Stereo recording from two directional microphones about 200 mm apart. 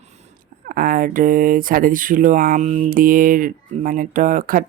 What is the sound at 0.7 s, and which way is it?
Speech, 45° right (ahead or behind).